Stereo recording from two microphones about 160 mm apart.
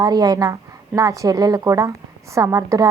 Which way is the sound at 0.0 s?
25° right (ahead or behind).